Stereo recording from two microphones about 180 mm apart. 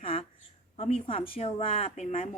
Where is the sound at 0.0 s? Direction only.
30° left (ahead or behind).